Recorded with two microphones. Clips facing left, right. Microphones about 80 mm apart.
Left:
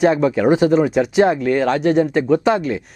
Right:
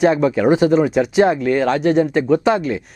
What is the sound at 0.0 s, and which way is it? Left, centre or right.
Speech, centre.